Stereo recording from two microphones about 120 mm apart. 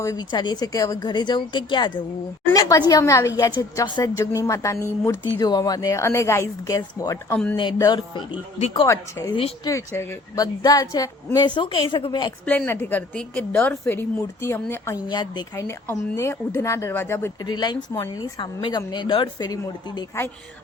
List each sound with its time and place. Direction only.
0.0 s a woman's voice: 25° left (ahead or behind)
0.3 s a woman's voice: 40° left (ahead or behind)
7.3 s a woman's voice: 10° left (ahead or behind)
7.5 s a woman's voice: 40° left (ahead or behind)
12.5 s a woman's voice: 15° left (ahead or behind)
15.0 s a woman's voice: 35° left (ahead or behind)
15.5 s a woman's voice: 20° left (ahead or behind)
17.4 s a woman's voice: 35° left (ahead or behind)
19.5 s a woman's voice: 30° left (ahead or behind)